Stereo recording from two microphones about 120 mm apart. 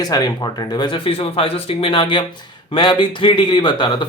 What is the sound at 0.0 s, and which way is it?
Speech, 30° left (ahead or behind).